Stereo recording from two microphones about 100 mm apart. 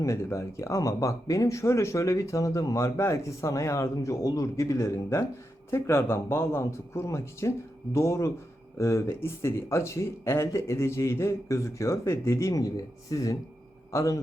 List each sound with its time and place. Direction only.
0.0 s speech: 30° left (ahead or behind)